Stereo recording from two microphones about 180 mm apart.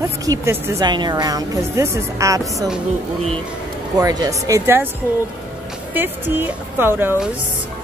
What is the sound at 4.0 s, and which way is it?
Speech, 20° right (ahead or behind).